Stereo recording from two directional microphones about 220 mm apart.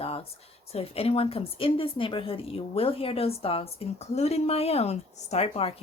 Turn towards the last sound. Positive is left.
turn(degrees=30)  # may be behind; listen again after turning